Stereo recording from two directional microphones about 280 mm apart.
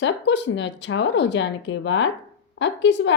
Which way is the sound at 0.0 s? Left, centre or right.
Left.